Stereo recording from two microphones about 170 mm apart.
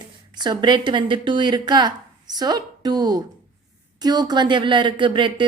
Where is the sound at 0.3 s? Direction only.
25° right (ahead or behind).